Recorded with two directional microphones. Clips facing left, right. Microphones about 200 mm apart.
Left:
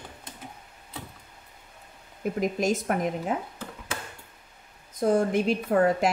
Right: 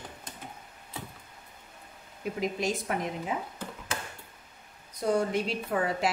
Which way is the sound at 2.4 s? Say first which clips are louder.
Left 5 dB; 45° left (ahead or behind).